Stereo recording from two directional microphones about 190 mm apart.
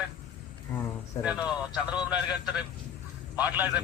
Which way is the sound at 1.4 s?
5° right (ahead or behind).